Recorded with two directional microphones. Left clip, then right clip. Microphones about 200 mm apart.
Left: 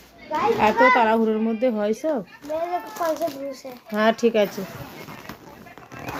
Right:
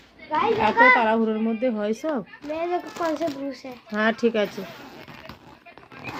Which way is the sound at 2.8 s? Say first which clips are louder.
Left 1 dB; 35° right (ahead or behind).